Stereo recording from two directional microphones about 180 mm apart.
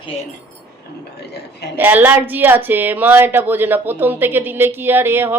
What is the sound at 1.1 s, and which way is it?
Speech, 65° left (ahead or behind).